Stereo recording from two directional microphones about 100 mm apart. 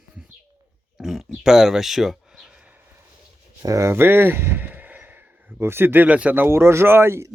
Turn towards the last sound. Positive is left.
turn(degrees=-25)  # may be behind; listen again after turning